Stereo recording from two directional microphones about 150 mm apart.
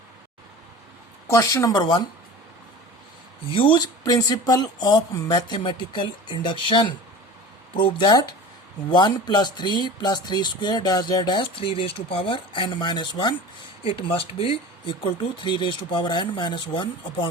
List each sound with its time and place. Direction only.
1.3 s speech: 20° left (ahead or behind)
3.5 s speech: 35° left (ahead or behind)